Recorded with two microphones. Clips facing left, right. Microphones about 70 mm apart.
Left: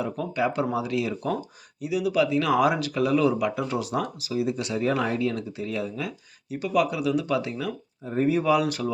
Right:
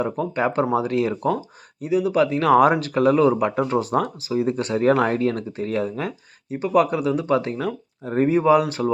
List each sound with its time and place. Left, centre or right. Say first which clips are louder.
0.0 s speech: right 4 dB; right
8.0 s speech: right 4 dB; right
8.3 s speech: right 5 dB; right